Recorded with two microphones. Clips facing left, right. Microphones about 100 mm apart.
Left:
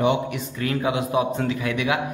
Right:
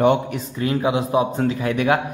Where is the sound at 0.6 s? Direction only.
25° right (ahead or behind); by 2.0 s 45° right (ahead or behind).